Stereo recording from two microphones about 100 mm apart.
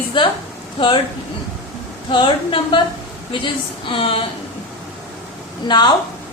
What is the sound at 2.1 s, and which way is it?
Speech, 55° left (ahead or behind).